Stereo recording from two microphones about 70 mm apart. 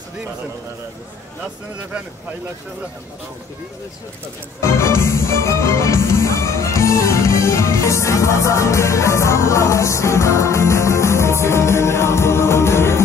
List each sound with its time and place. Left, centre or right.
4.6 s music: left